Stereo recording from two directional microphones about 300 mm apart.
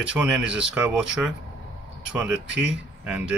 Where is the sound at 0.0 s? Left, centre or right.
Centre.